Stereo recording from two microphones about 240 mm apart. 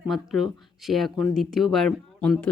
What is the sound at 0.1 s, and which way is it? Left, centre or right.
Speech, centre.